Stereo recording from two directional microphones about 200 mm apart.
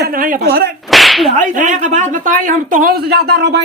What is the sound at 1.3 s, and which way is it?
Speech, 40° right (ahead or behind).